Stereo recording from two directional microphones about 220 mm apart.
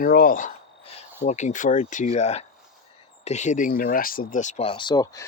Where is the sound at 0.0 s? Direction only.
40° left (ahead or behind).